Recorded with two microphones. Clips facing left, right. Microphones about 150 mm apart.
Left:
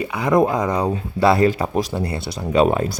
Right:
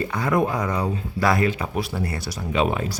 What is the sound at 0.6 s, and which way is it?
Speech, 35° left (ahead or behind).